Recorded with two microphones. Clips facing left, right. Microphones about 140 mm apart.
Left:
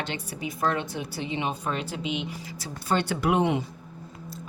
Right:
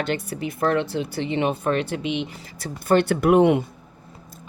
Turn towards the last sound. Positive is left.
turn(degrees=-55)  # may be behind; listen again after turning